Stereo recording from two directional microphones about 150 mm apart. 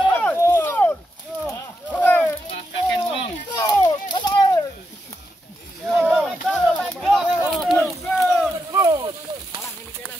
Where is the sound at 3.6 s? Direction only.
25° left (ahead or behind).